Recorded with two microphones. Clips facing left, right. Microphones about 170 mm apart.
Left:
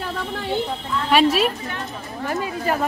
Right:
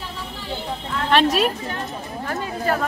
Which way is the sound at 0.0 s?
60° left (ahead or behind).